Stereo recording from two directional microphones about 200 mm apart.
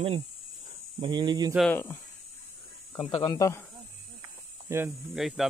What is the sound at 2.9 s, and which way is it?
Speech, 20° left (ahead or behind).